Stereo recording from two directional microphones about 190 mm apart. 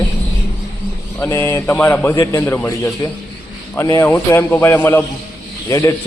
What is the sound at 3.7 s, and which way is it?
A man's voice, 15° left (ahead or behind).